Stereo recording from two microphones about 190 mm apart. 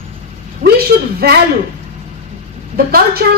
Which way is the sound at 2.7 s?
50° right (ahead or behind).